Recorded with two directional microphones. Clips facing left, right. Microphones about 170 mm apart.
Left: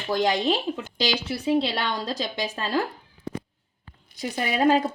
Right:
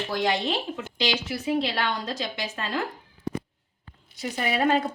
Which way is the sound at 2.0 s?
35° left (ahead or behind).